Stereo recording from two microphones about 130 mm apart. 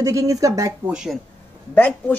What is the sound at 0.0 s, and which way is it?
Speech, 25° right (ahead or behind).